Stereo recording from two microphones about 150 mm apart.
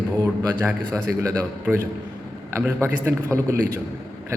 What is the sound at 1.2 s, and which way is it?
Speech, 20° right (ahead or behind).